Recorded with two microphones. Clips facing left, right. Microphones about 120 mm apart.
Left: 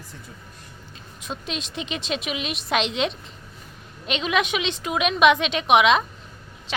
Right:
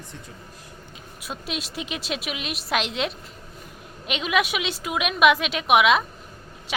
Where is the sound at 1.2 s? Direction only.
5° right (ahead or behind).